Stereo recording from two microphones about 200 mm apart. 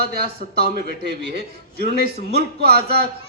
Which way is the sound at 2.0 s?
55° right (ahead or behind).